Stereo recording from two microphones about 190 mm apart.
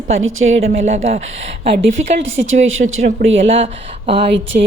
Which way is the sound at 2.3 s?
90° right.